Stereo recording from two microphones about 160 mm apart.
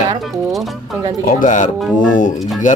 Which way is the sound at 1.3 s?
55° left (ahead or behind).